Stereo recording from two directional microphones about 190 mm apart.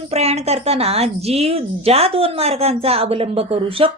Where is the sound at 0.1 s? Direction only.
35° right (ahead or behind).